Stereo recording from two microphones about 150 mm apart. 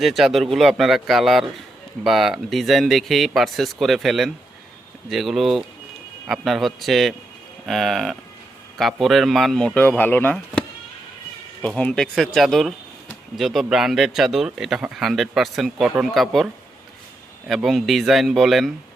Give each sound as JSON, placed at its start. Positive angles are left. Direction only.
{"t": 0.0, "sound": "speech", "side_deg": 0}
{"t": 11.6, "sound": "speech", "side_deg": 5}
{"t": 17.5, "sound": "speech", "side_deg": 0}